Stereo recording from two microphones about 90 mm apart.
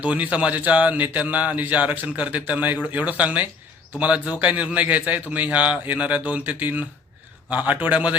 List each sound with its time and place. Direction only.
0.0 s a man's voice: 15° right (ahead or behind)